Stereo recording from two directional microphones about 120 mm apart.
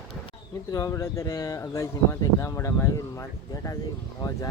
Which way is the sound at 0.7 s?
25° left (ahead or behind).